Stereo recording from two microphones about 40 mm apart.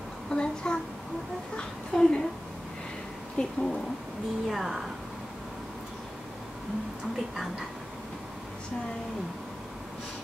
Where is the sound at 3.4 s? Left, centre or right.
Centre.